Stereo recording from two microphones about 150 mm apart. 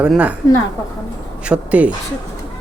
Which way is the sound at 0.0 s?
10° right (ahead or behind).